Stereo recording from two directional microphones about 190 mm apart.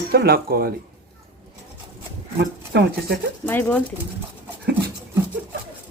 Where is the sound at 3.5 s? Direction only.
10° left (ahead or behind).